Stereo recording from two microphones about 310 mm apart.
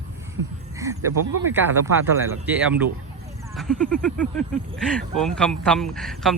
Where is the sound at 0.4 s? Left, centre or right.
Right.